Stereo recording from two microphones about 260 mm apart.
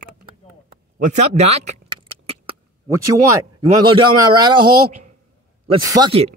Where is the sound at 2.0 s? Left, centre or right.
Right.